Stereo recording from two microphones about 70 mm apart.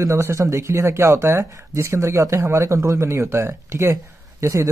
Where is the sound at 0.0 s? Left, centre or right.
Right.